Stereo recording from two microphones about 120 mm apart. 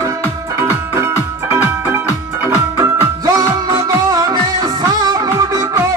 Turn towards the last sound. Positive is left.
turn(degrees=-30)  # may be behind; listen again after turning